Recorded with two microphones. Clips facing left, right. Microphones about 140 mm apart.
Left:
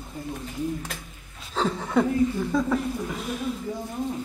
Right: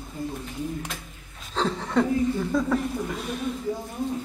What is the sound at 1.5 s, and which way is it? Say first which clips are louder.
Chuckle: left 1 dB; 5° left (ahead or behind).